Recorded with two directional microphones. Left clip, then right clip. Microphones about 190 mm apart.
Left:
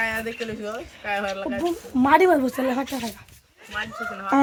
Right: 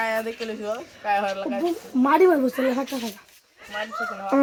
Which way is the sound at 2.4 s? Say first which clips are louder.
Right 1 dB; 35° left (ahead or behind).